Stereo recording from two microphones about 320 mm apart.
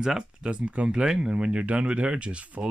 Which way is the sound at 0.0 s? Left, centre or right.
Centre.